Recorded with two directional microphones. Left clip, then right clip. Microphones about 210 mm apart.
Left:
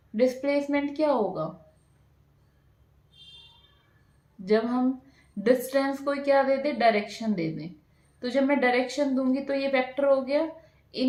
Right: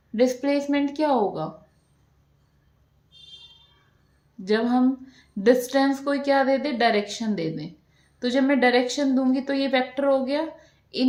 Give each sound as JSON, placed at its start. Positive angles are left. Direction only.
{"t": 0.2, "sound": "a woman's voice", "side_deg": -50}
{"t": 4.4, "sound": "a woman's voice", "side_deg": -50}